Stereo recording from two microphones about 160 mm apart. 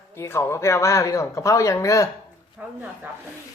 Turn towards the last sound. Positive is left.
turn(degrees=-10)  # may be behind; listen again after turning